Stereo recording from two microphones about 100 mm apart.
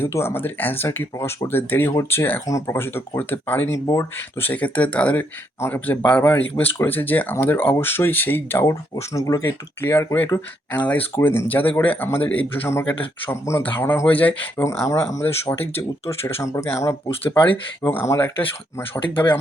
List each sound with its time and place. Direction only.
0.0 s speech: 25° left (ahead or behind)
2.5 s speech: 35° left (ahead or behind)
9.1 s speech: 35° left (ahead or behind)
10.7 s speech: 15° left (ahead or behind)
14.6 s speech: 30° left (ahead or behind)
17.4 s speech: 20° left (ahead or behind)
19.0 s speech: 50° left (ahead or behind)